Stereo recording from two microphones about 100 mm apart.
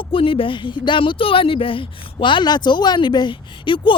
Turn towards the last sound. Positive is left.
turn(degrees=55)  # may be behind; listen again after turning